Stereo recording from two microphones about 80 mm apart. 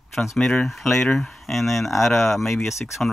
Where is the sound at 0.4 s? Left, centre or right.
Centre.